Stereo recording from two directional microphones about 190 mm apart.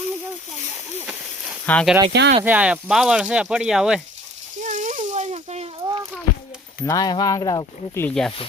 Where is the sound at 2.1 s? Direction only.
60° right (ahead or behind).